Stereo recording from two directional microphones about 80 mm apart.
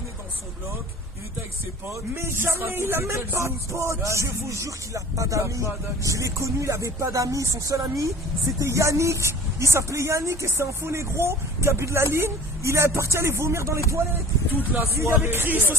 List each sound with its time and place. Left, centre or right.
1.9 s speech: right
14.5 s speech: right